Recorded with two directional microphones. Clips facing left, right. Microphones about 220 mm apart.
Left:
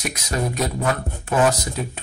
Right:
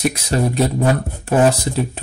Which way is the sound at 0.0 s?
30° right (ahead or behind).